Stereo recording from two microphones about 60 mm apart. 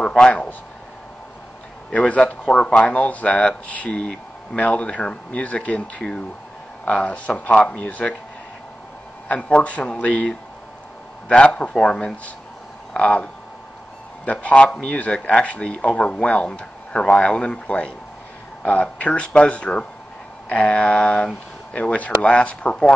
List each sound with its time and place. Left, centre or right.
0.2 s speech: centre
1.9 s speech: left
9.3 s speech: left